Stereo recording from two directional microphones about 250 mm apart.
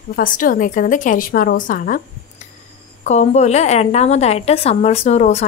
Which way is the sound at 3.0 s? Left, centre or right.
Left.